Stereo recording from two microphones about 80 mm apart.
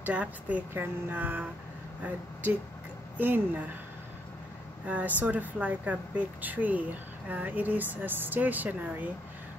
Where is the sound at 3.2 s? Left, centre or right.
Right.